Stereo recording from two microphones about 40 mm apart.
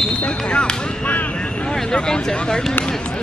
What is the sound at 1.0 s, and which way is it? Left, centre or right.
Speech, left.